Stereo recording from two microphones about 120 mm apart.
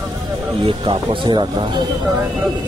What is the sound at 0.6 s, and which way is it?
Speech, 45° right (ahead or behind).